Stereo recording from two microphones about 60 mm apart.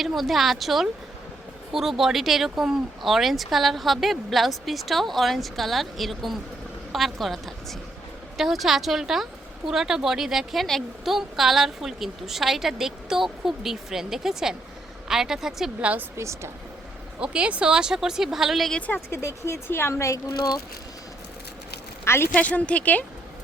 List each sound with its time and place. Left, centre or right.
0.0 s speech: centre
15.8 s a woman's voice: right
16.1 s speech: right
17.2 s speech: centre
19.1 s speech: left
22.0 s speech: left
22.4 s speech: left